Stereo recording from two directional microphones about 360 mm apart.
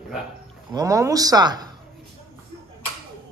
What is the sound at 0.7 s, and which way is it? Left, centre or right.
Speech, centre.